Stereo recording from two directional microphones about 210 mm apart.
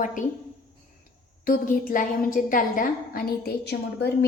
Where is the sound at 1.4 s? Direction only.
40° left (ahead or behind).